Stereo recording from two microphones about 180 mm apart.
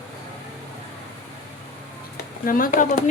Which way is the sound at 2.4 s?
50° left (ahead or behind).